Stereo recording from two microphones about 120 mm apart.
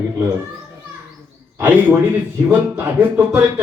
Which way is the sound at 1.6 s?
15° right (ahead or behind).